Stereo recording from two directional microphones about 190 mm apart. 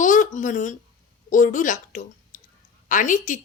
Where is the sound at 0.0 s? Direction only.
40° left (ahead or behind).